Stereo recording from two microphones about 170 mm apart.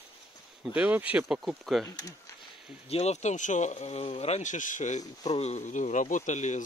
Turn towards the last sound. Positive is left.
turn(degrees=45)  # may be behind; listen again after turning